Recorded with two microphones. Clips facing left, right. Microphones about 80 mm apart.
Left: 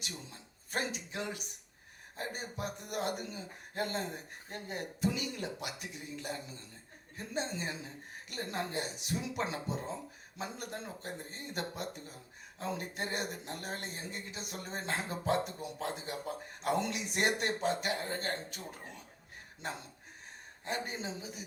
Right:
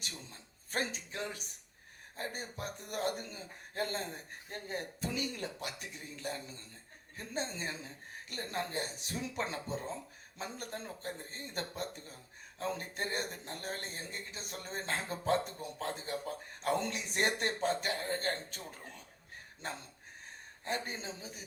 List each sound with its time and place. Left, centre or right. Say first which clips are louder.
0.0 s a man's voice: left 2 dB; right
20.7 s a man's voice: left 1 dB; right